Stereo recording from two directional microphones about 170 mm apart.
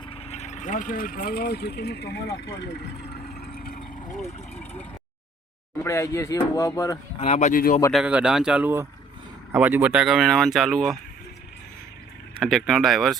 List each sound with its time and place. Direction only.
0.1 s speech: 35° left (ahead or behind); by 3.2 s 70° left (ahead or behind)
3.4 s vehicle: 60° left (ahead or behind)
4.2 s speech: 10° left (ahead or behind)
7.2 s speech: 40° left (ahead or behind)
7.9 s speech: 5° right (ahead or behind)
12.4 s speech: centre (ahead or behind)